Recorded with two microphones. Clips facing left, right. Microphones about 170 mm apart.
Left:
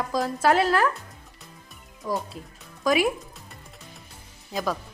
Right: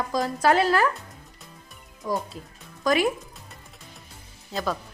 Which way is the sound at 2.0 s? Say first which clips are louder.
Right 1 dB; centre (ahead or behind).